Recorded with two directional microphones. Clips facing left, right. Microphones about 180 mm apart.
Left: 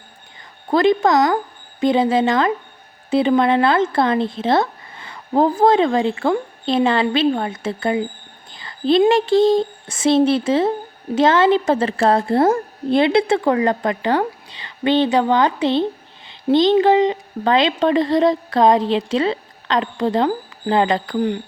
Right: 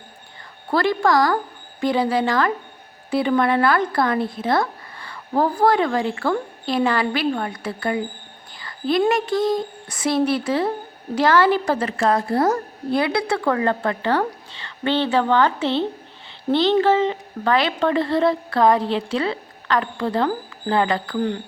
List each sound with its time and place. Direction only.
0.7 s speech: 20° left (ahead or behind)